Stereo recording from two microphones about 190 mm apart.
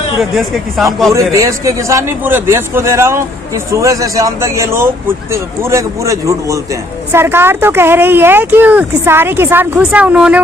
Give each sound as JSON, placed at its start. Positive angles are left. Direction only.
{"t": 0.2, "sound": "speech", "side_deg": 0}
{"t": 1.1, "sound": "a man's voice", "side_deg": -15}